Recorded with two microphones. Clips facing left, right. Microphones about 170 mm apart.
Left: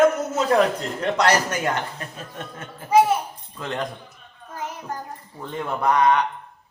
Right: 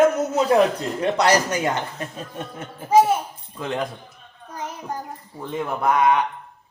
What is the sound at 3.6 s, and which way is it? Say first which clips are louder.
Speech: right 2 dB; 10° right (ahead or behind).